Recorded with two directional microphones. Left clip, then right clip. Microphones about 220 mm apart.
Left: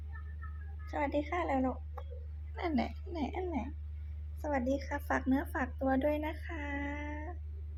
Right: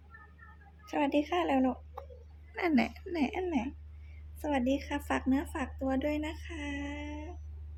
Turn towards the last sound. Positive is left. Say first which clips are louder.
# even
turn(degrees=-10)  # may be behind; listen again after turning